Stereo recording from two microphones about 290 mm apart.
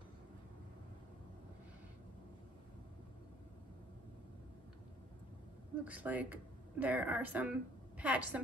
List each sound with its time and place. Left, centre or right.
5.9 s speech: centre